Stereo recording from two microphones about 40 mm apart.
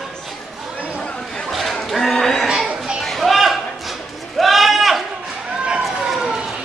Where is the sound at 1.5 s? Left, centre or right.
Centre.